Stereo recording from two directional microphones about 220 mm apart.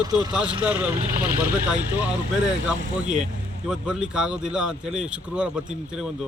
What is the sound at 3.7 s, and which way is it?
Speech, 5° right (ahead or behind).